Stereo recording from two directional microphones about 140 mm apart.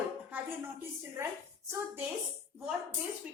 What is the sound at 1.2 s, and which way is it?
Speech, 20° right (ahead or behind).